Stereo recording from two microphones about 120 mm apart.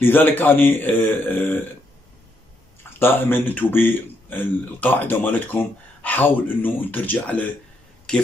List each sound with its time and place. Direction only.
0.0 s speech: 15° left (ahead or behind)
3.0 s speech: 15° left (ahead or behind)